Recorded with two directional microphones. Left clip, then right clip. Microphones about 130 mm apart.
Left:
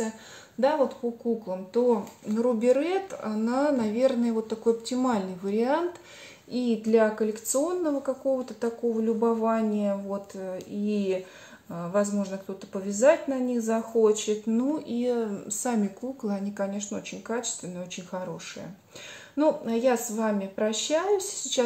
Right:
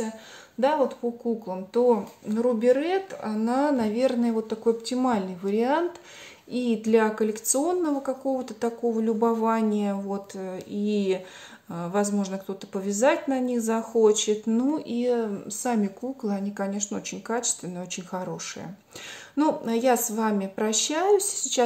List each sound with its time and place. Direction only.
0.6 s a woman's voice: 20° right (ahead or behind)
2.4 s a woman's voice: 15° right (ahead or behind)
6.5 s speech: 35° right (ahead or behind)
14.8 s a woman's voice: 25° right (ahead or behind); by 21.6 s 40° right (ahead or behind)